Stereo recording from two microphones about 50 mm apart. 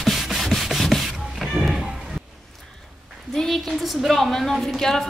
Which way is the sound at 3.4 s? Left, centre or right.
Centre.